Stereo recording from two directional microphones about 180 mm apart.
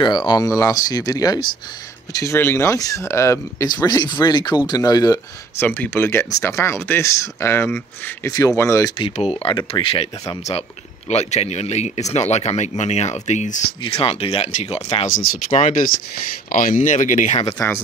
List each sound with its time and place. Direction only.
0.0 s speech: 25° left (ahead or behind)
9.1 s speech: 35° left (ahead or behind)
11.1 s speech: 40° left (ahead or behind)
17.6 s speech: 10° left (ahead or behind)